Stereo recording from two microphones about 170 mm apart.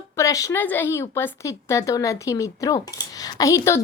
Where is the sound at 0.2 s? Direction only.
20° left (ahead or behind).